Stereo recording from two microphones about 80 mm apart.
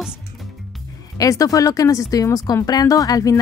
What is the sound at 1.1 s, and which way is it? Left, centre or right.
Speech, left.